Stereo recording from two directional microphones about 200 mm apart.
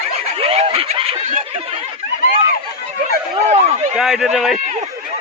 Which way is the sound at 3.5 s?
35° right (ahead or behind).